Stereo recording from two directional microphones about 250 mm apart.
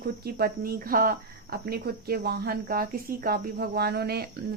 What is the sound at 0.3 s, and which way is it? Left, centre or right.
Speech, right.